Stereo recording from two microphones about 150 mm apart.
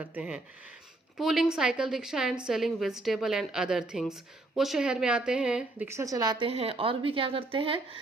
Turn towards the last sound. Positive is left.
turn(degrees=-35)  # may be behind; listen again after turning